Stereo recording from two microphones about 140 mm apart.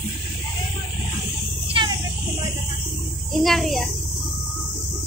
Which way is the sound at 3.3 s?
Centre (ahead or behind).